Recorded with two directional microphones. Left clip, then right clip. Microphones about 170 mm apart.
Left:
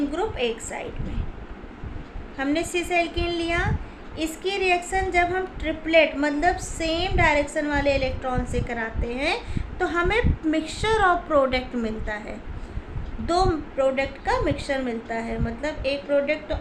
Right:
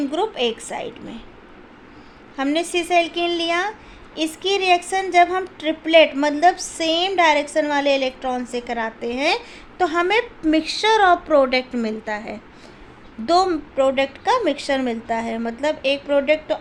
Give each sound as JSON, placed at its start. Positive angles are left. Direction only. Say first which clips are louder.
{"t": 0.1, "sound": "a woman's voice", "louder": "right 4 dB", "side_deg": -45}
{"t": 2.4, "sound": "a woman's voice", "louder": "right 4 dB", "side_deg": -45}